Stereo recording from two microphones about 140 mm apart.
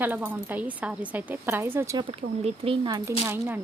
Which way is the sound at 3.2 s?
10° right (ahead or behind).